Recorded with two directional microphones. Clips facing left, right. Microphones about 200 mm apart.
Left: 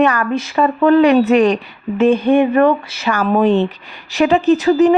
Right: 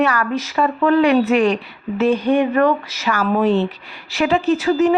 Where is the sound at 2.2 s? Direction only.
25° left (ahead or behind).